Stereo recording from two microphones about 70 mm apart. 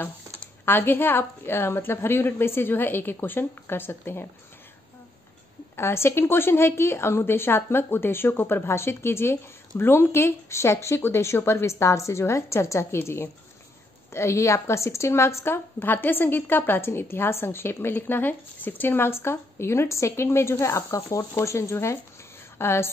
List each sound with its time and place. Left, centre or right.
0.7 s a woman's voice: left
5.8 s a woman's voice: left